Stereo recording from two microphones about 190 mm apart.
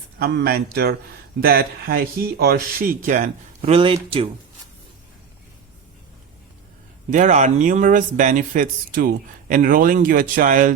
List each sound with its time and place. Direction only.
0.2 s a man's voice: 55° right (ahead or behind)
3.6 s speech: 30° right (ahead or behind)
7.1 s speech: 40° right (ahead or behind)